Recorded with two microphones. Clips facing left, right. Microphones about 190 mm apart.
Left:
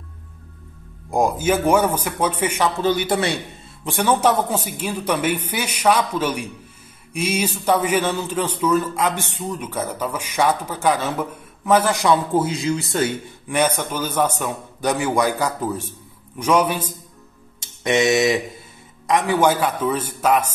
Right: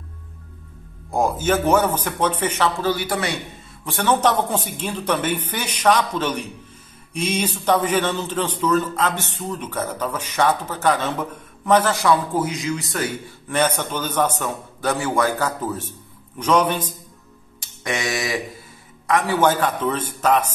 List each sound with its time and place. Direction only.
1.1 s a man's voice: 15° left (ahead or behind)
3.8 s a man's voice: 15° left (ahead or behind)
13.5 s a man's voice: 10° left (ahead or behind)
17.6 s a sound: 20° left (ahead or behind)
19.0 s a man's voice: 15° left (ahead or behind)